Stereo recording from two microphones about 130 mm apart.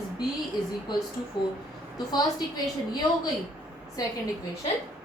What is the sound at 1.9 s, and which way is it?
Speech, 30° left (ahead or behind).